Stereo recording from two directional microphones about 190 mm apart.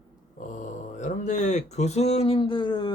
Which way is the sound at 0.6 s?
40° left (ahead or behind).